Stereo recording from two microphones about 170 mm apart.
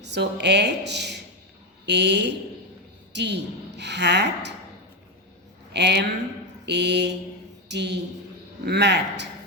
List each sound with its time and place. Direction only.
0.0 s a woman's voice: 90° right
5.7 s a woman's voice: 85° right